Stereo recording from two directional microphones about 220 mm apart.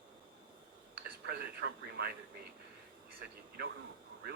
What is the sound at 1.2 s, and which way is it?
Speech, 50° right (ahead or behind).